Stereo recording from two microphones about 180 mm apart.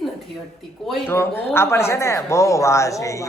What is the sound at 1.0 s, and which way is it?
Speech, 15° left (ahead or behind).